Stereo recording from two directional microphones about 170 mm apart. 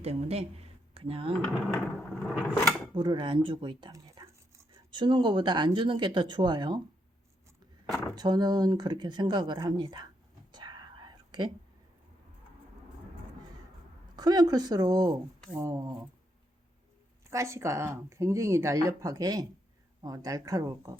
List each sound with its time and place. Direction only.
0.0 s speech: 40° right (ahead or behind)
1.7 s speech: 5° left (ahead or behind)
2.9 s speech: 30° right (ahead or behind)
8.1 s speech: 25° right (ahead or behind)
10.5 s whispering: 25° right (ahead or behind)
14.2 s speech: 25° right (ahead or behind)
17.2 s speech: 15° right (ahead or behind)